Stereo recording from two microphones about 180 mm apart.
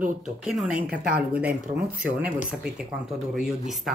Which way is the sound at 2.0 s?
5° right (ahead or behind).